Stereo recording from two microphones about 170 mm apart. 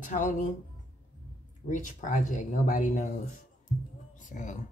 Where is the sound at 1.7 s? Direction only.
50° left (ahead or behind).